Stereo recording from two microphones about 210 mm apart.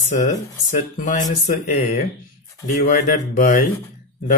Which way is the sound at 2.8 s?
40° left (ahead or behind).